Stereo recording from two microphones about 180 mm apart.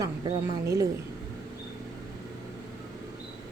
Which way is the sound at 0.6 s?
15° right (ahead or behind).